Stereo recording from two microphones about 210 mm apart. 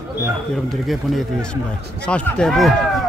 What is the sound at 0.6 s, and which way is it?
Speech, centre (ahead or behind).